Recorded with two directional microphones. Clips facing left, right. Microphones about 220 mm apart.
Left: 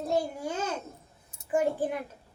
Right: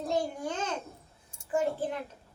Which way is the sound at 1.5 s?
15° left (ahead or behind).